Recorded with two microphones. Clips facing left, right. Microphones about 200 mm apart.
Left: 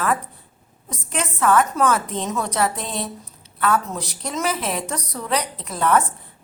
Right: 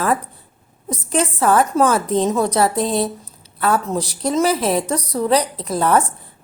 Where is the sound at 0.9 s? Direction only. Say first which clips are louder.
Right 8 dB; 35° right (ahead or behind).